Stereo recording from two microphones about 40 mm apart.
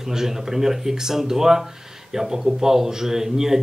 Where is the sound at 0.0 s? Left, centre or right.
Centre.